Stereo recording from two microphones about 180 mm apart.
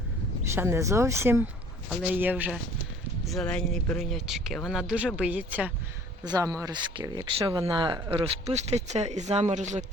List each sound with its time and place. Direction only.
0.4 s speech: 15° right (ahead or behind)
3.2 s speech: 5° left (ahead or behind)
6.2 s speech: 20° right (ahead or behind)
8.2 s a man's voice: 35° right (ahead or behind)